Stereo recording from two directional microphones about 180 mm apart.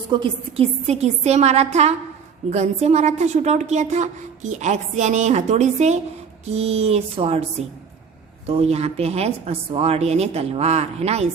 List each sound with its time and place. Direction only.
0.1 s a woman's voice: 25° right (ahead or behind)
8.4 s a woman's voice: 35° right (ahead or behind)